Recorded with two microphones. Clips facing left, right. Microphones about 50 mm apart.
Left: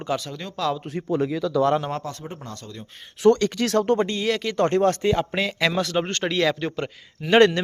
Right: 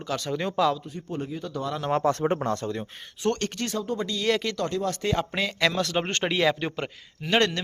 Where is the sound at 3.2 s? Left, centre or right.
Left.